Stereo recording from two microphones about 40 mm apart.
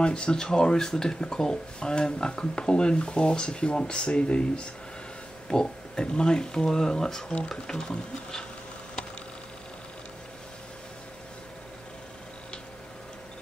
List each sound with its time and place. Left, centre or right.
0.0 s speech: left